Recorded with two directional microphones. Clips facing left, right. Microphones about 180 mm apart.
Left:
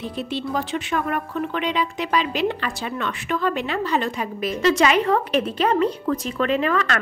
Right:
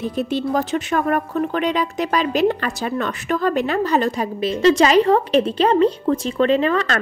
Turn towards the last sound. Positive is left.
turn(degrees=-30)  # may be behind; listen again after turning